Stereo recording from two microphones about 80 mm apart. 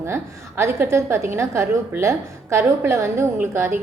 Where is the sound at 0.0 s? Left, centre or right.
Right.